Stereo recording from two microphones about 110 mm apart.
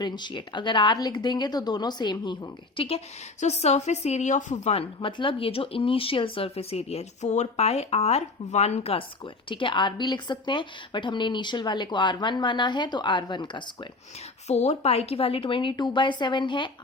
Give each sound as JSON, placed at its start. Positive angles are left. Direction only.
{"t": 0.0, "sound": "speech", "side_deg": 45}
{"t": 3.4, "sound": "a woman's voice", "side_deg": 80}
{"t": 4.9, "sound": "speech", "side_deg": 50}
{"t": 14.4, "sound": "speech", "side_deg": 90}